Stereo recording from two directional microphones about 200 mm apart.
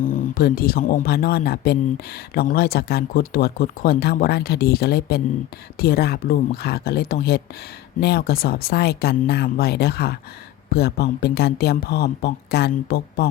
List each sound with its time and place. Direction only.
0.0 s speech: 45° left (ahead or behind)